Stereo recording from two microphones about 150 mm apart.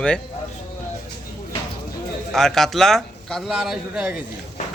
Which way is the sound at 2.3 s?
5° left (ahead or behind).